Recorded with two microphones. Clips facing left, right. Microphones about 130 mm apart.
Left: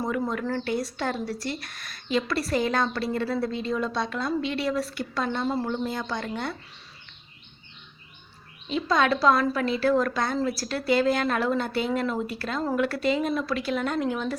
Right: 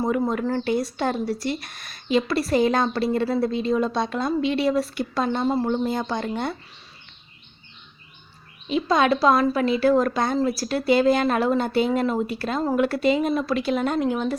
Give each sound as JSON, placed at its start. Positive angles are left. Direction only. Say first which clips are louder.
{"t": 0.0, "sound": "speech", "louder": "right 5 dB", "side_deg": -25}
{"t": 8.7, "sound": "speech", "louder": "right 3 dB", "side_deg": -15}